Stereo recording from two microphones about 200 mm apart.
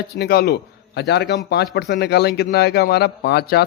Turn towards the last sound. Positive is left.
turn(degrees=55)  # may be behind; listen again after turning